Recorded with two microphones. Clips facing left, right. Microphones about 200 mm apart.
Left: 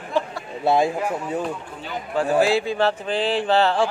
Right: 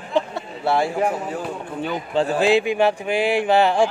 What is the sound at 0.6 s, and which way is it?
Speech, 20° left (ahead or behind).